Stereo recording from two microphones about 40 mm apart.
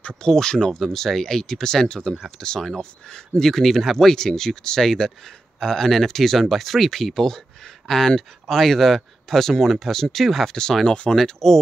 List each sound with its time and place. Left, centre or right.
0.2 s speech: centre
11.1 s speech: centre